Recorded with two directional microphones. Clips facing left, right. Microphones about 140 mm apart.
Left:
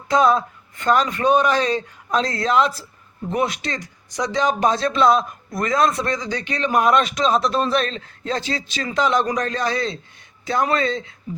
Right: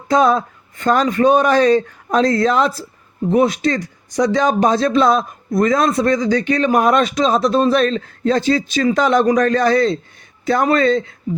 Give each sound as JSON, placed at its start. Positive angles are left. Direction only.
{"t": 0.1, "sound": "speech", "side_deg": -45}